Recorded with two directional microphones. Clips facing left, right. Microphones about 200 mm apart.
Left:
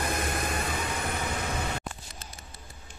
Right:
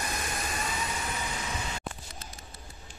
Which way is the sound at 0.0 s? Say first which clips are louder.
Left 5 dB; 55° left (ahead or behind).